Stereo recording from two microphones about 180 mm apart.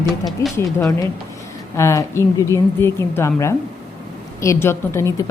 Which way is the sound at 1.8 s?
15° left (ahead or behind).